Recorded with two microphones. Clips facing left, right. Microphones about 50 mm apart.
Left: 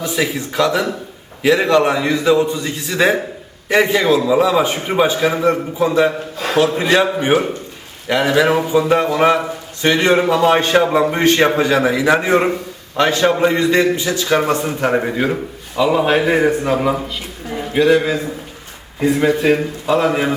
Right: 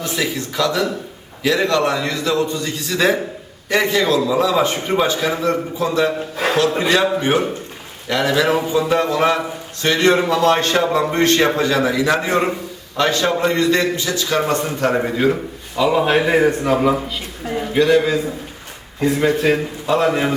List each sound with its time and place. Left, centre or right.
0.0 s a man's voice: centre